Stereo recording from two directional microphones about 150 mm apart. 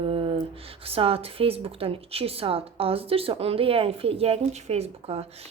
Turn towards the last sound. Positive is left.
turn(degrees=-45)  # may be behind; listen again after turning